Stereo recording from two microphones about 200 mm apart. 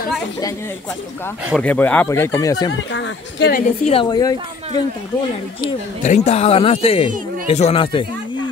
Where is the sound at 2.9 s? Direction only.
65° left (ahead or behind).